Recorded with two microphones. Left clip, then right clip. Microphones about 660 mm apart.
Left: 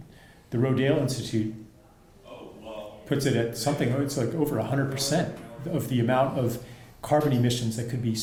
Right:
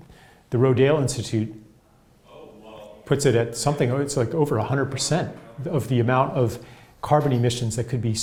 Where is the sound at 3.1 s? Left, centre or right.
Right.